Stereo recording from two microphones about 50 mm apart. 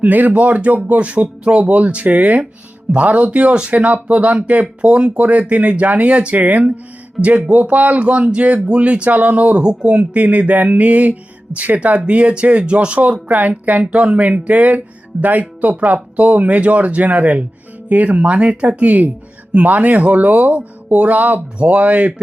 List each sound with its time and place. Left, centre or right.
0.0 s music: right
15.2 s speech: right
16.1 s music: right
19.5 s speech: right
21.6 s music: right